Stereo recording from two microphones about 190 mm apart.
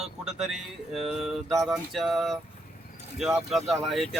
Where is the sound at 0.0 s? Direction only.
Centre (ahead or behind).